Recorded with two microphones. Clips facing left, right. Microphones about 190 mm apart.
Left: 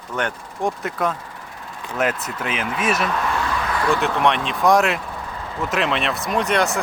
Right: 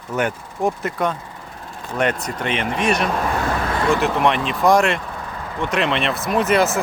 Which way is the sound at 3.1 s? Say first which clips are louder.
Right 2 dB; 40° right (ahead or behind).